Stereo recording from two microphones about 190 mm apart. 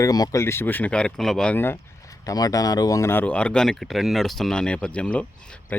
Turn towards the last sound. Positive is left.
turn(degrees=10)  # may be behind; listen again after turning